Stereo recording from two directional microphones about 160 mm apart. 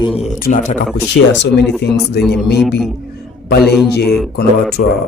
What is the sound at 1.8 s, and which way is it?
Speech, 90° left.